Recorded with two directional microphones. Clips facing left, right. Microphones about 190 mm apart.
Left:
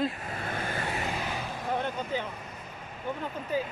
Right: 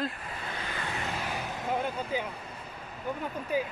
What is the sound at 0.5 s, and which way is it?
Vehicle, 45° left (ahead or behind).